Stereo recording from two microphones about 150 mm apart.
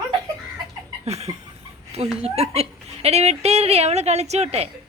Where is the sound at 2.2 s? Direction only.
45° right (ahead or behind).